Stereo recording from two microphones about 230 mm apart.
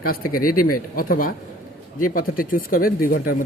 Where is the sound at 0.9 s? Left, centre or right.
Left.